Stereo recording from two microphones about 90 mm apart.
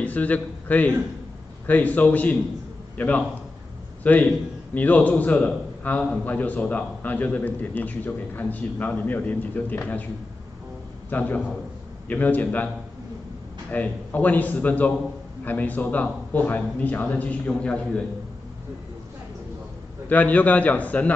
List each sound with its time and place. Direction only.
0.0 s a man's voice: 15° left (ahead or behind)
11.1 s a man's voice: 20° left (ahead or behind)
13.7 s a man's voice: 15° left (ahead or behind)
20.1 s a man's voice: 15° left (ahead or behind)